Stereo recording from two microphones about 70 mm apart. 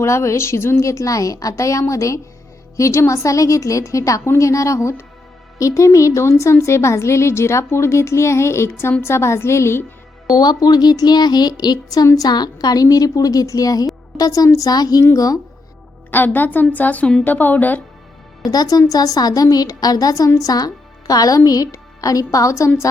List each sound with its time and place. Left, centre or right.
0.0 s a woman's voice: left
10.3 s a woman's voice: left
15.0 s a woman's voice: left
16.1 s a woman's voice: left
18.4 s a woman's voice: left